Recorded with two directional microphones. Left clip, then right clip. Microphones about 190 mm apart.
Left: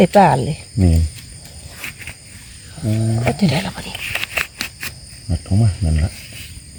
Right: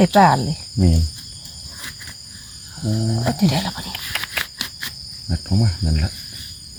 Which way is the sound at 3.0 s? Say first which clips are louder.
Left 2 dB; 10° right (ahead or behind).